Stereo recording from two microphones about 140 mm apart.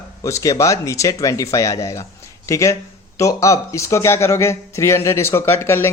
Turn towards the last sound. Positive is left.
turn(degrees=15)  # may be behind; listen again after turning